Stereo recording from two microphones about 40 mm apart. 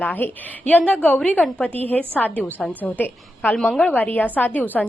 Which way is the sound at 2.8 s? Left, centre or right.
Left.